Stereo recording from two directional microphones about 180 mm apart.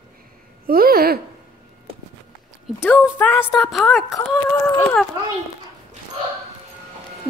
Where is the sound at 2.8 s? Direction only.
10° left (ahead or behind).